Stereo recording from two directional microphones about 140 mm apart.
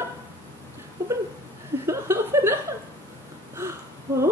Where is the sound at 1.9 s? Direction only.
20° right (ahead or behind).